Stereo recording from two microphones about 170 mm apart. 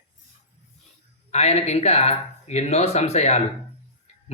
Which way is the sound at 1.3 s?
40° left (ahead or behind).